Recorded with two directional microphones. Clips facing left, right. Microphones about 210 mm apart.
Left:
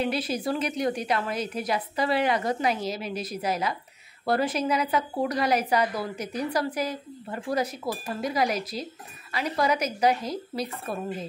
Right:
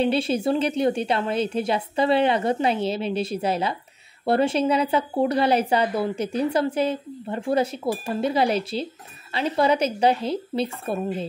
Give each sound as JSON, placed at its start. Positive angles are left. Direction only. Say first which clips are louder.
{"t": 0.0, "sound": "a woman's voice", "louder": "right 6 dB", "side_deg": -30}